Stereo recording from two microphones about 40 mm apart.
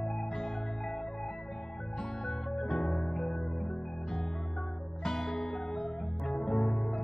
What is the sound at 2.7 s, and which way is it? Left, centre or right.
Music, centre.